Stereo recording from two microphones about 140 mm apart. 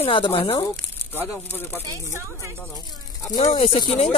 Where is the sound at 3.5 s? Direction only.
40° left (ahead or behind).